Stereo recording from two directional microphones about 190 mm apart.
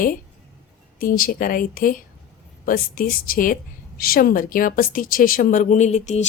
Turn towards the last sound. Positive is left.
turn(degrees=35)  # may be behind; listen again after turning